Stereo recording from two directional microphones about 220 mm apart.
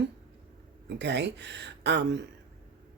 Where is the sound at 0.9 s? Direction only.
50° right (ahead or behind).